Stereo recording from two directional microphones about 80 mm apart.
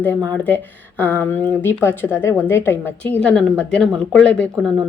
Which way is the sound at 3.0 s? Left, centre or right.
Centre.